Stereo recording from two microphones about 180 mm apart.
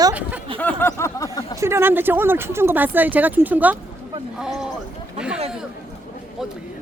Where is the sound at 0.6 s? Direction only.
10° left (ahead or behind).